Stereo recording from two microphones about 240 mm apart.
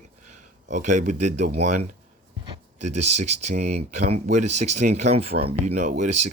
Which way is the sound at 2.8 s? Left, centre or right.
Right.